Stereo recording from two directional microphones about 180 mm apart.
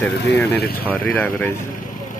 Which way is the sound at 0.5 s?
60° left (ahead or behind).